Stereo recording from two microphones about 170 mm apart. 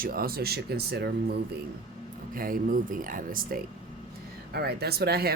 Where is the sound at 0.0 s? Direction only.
60° right (ahead or behind).